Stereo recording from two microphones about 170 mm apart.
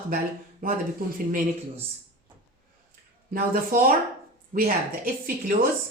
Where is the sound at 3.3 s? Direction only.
60° right (ahead or behind).